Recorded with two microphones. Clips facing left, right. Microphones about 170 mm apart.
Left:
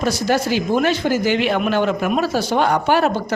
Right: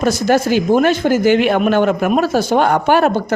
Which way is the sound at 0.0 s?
50° right (ahead or behind).